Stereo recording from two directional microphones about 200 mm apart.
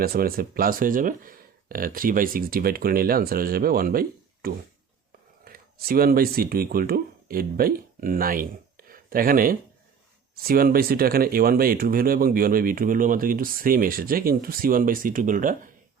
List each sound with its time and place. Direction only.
0.0 s speech: 50° right (ahead or behind)
5.5 s speech: 50° right (ahead or behind)